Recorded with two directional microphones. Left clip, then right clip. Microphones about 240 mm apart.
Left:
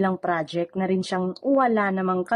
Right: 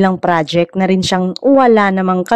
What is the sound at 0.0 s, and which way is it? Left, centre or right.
Speech, right.